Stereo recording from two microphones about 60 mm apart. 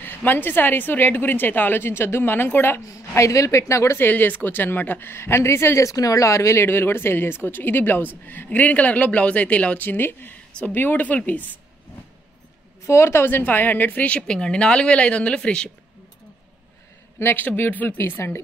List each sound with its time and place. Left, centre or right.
0.0 s speech: left
2.9 s a woman's voice: left
4.0 s a woman's voice: left
12.8 s a woman's voice: left; by 15.7 s centre
17.2 s speech: left
17.9 s speech: left